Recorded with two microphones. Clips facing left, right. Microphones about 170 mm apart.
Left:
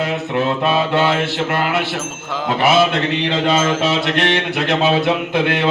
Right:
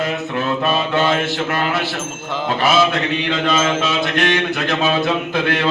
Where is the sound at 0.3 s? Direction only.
25° left (ahead or behind).